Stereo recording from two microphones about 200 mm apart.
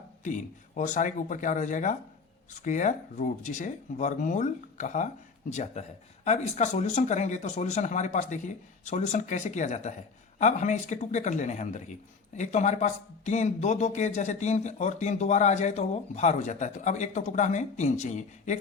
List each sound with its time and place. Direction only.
0.3 s speech: 40° left (ahead or behind)